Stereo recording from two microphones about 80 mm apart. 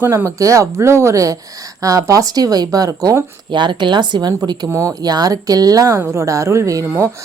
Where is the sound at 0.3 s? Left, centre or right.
Right.